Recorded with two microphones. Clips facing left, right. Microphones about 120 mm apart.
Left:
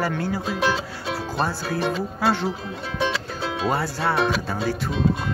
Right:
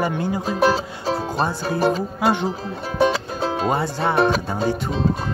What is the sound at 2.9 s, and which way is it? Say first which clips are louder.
Music: right 7 dB; 35° right (ahead or behind).